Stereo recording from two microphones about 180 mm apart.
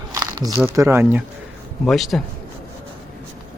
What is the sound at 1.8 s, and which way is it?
Speech, centre (ahead or behind).